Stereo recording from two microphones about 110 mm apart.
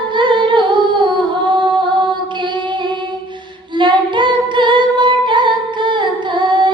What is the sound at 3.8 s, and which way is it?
Singing, 45° right (ahead or behind).